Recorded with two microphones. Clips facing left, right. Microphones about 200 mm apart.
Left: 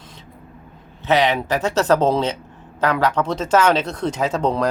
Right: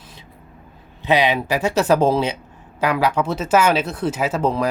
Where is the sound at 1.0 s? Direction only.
10° right (ahead or behind).